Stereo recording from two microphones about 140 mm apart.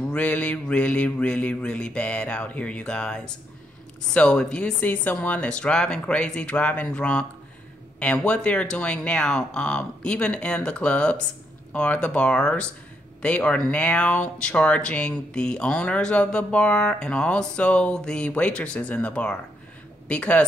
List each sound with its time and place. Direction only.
0.1 s speech: 10° left (ahead or behind)